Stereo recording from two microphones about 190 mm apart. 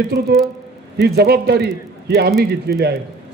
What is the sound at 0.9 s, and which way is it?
A man's voice, 60° right (ahead or behind).